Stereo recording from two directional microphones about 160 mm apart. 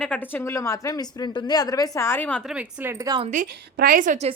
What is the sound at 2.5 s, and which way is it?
Speech, 10° right (ahead or behind).